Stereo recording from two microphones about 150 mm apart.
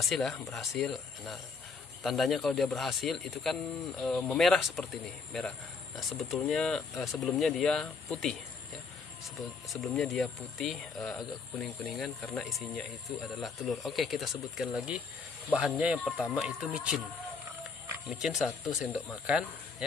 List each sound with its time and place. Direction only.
0.0 s speech: centre (ahead or behind)
9.4 s speech: centre (ahead or behind)
18.1 s speech: 5° right (ahead or behind)